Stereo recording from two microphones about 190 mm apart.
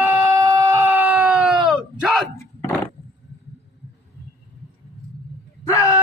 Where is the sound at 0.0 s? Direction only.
15° right (ahead or behind).